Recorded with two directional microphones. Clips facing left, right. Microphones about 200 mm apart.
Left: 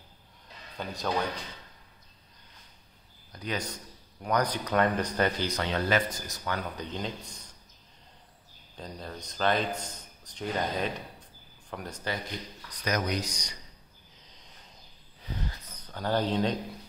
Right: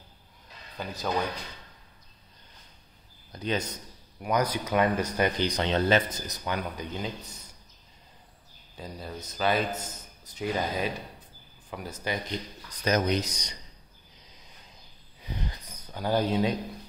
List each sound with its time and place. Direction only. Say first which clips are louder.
0.7 s speech: even; centre (ahead or behind)
3.3 s speech: right 4 dB; 25° right (ahead or behind)
4.2 s speech: right 1 dB; 10° right (ahead or behind)
8.7 s a man's voice: right 2 dB; 5° right (ahead or behind)
12.8 s speech: right 4 dB; 25° right (ahead or behind)
15.4 s a sound: right 1 dB; 15° right (ahead or behind)